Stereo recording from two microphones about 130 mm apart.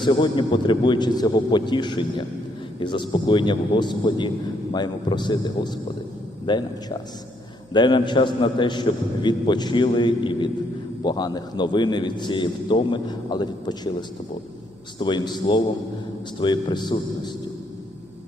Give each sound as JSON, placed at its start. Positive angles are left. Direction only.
{"t": 0.0, "sound": "a man's voice", "side_deg": 35}
{"t": 7.7, "sound": "a man's voice", "side_deg": 35}
{"t": 14.9, "sound": "a man's voice", "side_deg": 35}